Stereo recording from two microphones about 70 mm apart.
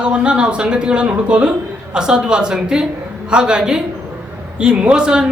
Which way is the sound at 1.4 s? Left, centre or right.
Centre.